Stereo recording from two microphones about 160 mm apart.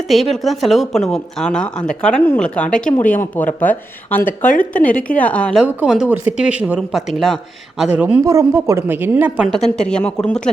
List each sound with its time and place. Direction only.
0.1 s a woman's voice: centre (ahead or behind)
4.4 s speech: 55° left (ahead or behind)
4.8 s a woman's voice: 10° left (ahead or behind)
5.6 s a woman's voice: 5° right (ahead or behind)
9.9 s a woman's voice: 5° left (ahead or behind)